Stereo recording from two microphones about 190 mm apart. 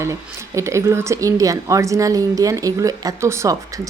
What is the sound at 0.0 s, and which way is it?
Speech, 15° right (ahead or behind).